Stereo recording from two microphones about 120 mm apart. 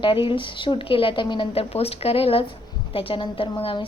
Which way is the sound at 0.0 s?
45° left (ahead or behind).